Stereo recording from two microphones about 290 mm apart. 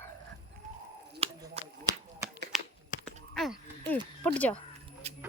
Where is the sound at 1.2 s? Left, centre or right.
Centre.